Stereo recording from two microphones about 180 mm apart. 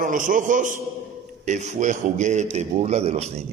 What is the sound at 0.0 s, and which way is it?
A man's voice, 50° right (ahead or behind).